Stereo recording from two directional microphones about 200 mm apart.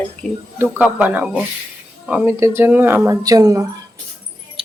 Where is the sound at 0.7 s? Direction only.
10° right (ahead or behind).